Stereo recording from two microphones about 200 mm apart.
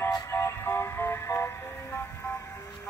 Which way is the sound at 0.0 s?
15° left (ahead or behind).